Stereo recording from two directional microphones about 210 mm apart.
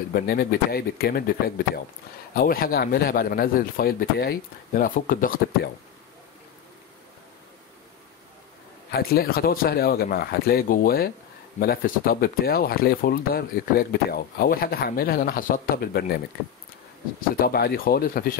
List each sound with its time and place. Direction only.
0.1 s speech: 45° left (ahead or behind)
2.3 s speech: 45° left (ahead or behind)
8.9 s speech: 45° left (ahead or behind)
17.4 s speech: 50° left (ahead or behind)